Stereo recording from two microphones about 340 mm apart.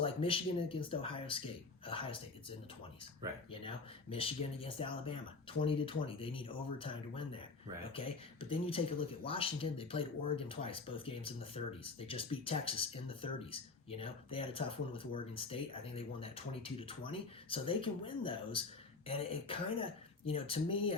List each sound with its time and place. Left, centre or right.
0.0 s speech: centre